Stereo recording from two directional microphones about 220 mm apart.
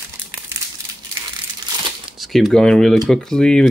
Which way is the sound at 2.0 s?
Centre (ahead or behind).